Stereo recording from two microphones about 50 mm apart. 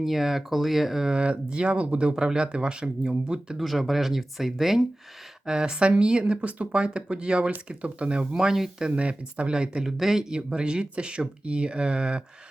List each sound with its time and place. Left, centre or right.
0.0 s speech: centre
1.1 s speech: right
3.6 s speech: centre
5.5 s speech: centre
8.4 s speech: centre
8.9 s speech: right
9.8 s speech: centre